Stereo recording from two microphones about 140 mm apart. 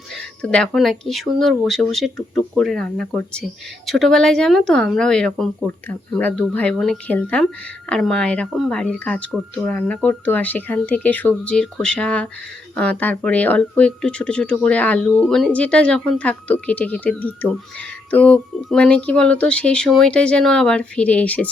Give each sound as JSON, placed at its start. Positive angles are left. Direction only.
{"t": 0.1, "sound": "speech", "side_deg": 5}